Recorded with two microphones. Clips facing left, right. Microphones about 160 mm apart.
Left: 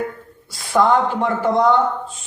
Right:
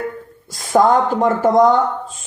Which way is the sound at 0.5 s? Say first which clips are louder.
Right 2 dB; 45° right (ahead or behind).